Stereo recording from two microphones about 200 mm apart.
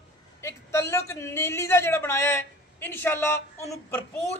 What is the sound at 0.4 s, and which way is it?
A man's voice, 15° left (ahead or behind).